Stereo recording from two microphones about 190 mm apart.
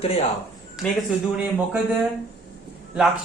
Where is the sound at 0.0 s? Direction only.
35° left (ahead or behind).